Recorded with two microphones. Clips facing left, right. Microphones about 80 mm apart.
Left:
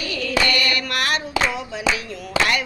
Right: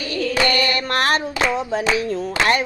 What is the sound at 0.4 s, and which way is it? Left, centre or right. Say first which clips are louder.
Female singing: right 3 dB; right.